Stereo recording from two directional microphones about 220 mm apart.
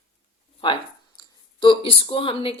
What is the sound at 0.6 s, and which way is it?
Speech, 20° left (ahead or behind).